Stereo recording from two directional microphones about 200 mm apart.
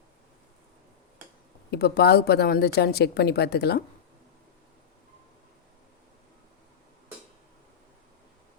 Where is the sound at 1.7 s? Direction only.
55° left (ahead or behind).